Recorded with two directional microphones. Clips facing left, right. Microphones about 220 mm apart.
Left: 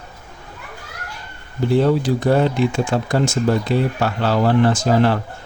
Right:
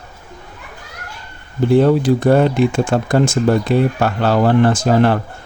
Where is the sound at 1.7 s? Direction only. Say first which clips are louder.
Right 4 dB; 55° right (ahead or behind).